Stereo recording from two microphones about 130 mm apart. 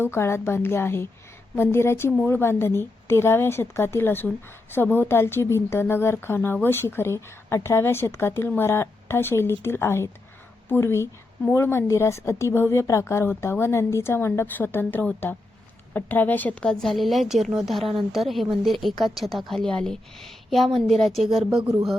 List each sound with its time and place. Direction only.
0.0 s a woman's voice: 20° left (ahead or behind); by 21.2 s centre (ahead or behind)